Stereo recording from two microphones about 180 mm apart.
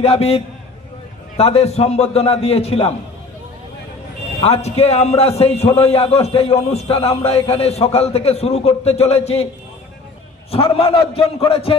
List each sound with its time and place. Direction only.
0.0 s a man's voice: 35° left (ahead or behind)
4.4 s a man's voice: 35° left (ahead or behind)
10.5 s a man's voice: 30° left (ahead or behind)